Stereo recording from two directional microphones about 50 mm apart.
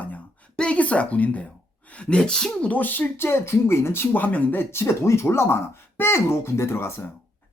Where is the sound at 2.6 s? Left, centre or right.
Left.